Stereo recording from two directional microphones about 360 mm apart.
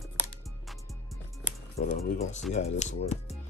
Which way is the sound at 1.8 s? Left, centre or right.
Centre.